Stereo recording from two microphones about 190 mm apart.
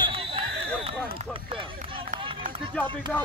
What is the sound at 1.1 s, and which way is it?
Speech, 30° right (ahead or behind).